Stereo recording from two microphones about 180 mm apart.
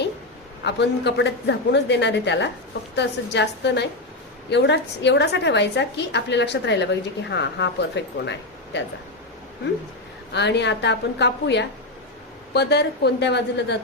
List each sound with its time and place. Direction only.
0.6 s a woman's voice: 70° left (ahead or behind)
10.3 s a woman's voice: 70° left (ahead or behind)